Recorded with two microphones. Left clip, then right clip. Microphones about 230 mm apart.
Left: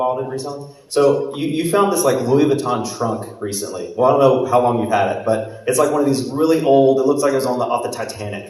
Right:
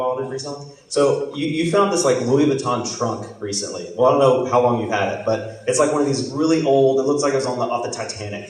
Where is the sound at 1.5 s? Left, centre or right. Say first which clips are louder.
Left 1 dB; left.